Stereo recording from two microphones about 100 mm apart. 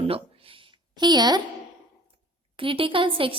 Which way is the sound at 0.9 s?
45° right (ahead or behind).